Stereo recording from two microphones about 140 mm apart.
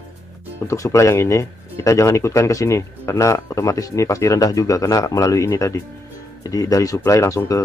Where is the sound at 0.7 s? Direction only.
20° left (ahead or behind).